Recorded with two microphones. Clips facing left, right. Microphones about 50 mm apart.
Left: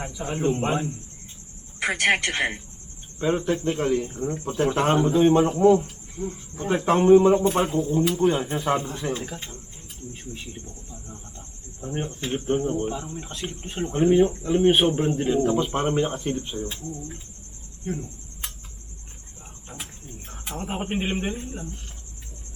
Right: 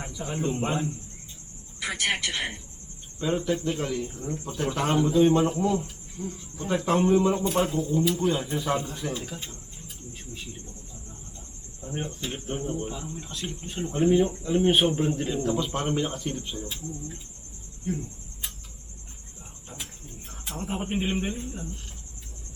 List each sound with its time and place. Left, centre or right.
0.0 s speech: centre
1.8 s speech: left
3.2 s speech: left
11.1 s a sound: left
11.9 s speech: centre
17.9 s speech: left
20.6 s speech: left